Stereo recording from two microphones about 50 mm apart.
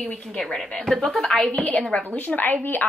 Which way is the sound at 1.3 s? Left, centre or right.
Left.